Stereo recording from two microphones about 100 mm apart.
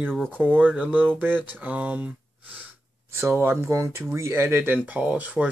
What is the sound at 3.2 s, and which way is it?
Speech, 25° right (ahead or behind).